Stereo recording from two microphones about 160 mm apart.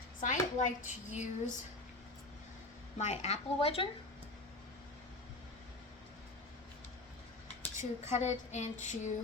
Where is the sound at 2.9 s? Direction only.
45° left (ahead or behind).